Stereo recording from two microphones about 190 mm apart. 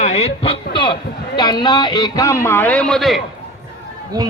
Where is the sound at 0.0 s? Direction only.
35° left (ahead or behind).